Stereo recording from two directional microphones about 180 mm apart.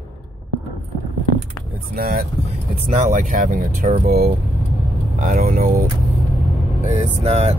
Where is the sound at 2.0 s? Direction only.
55° right (ahead or behind).